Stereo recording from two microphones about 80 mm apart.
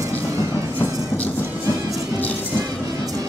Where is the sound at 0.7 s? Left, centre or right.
Centre.